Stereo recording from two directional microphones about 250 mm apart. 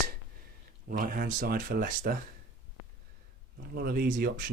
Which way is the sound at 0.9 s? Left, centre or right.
Right.